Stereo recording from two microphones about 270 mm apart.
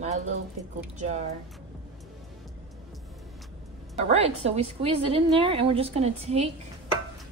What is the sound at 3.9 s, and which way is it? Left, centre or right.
A woman's voice, right.